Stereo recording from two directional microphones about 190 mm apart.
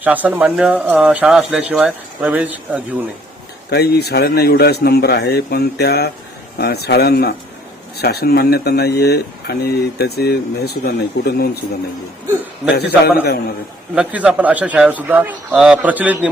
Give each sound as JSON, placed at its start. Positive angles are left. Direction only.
{"t": 0.0, "sound": "speech", "side_deg": -10}
{"t": 3.7, "sound": "speech", "side_deg": 60}
{"t": 13.9, "sound": "speech", "side_deg": -5}